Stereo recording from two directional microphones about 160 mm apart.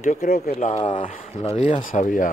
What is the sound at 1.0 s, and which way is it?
Speech, 50° left (ahead or behind).